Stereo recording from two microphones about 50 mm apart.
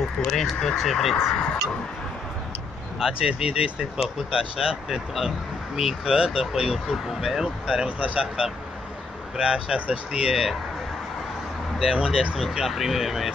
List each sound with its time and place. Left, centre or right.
0.2 s speech: centre
3.0 s speech: centre
11.8 s speech: centre
12.4 s speech: centre